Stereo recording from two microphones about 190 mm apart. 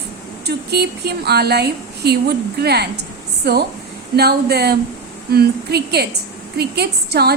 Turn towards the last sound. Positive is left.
turn(degrees=-60)  # may be behind; listen again after turning